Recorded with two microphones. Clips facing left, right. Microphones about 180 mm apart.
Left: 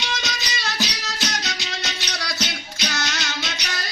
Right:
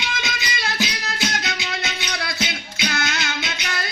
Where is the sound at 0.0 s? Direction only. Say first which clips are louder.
Right 1 dB; 55° right (ahead or behind).